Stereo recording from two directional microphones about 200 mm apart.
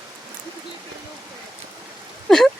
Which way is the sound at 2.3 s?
Centre (ahead or behind).